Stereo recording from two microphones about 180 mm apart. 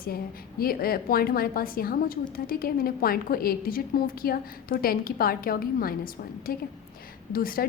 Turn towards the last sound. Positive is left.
turn(degrees=55)  # may be behind; listen again after turning